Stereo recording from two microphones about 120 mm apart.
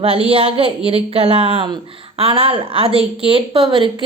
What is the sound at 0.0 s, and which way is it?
A woman's voice, 55° right (ahead or behind).